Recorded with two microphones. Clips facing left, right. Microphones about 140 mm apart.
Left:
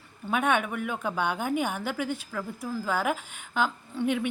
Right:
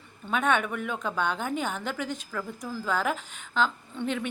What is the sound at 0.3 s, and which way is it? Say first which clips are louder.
A woman's voice: even; 10° left (ahead or behind).